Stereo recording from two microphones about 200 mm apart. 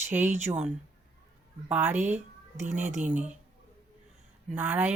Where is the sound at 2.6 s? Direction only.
35° right (ahead or behind).